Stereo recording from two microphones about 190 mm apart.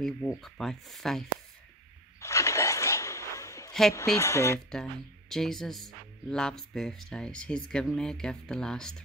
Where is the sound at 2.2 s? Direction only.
15° left (ahead or behind).